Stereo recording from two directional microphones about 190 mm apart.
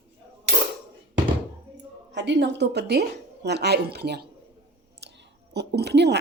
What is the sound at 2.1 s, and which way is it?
Speech, 65° right (ahead or behind).